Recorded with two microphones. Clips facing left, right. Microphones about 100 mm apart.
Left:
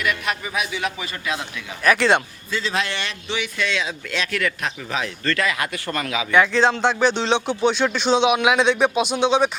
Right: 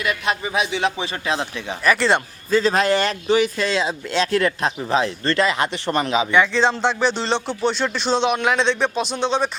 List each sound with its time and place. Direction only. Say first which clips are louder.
0.0 s a man's voice: right 2 dB; 25° right (ahead or behind)
1.8 s speech: left 1 dB; centre (ahead or behind)
2.5 s speech: right 8 dB; 40° right (ahead or behind); by 6.2 s 25° right (ahead or behind)
6.3 s speech: left 3 dB; centre (ahead or behind)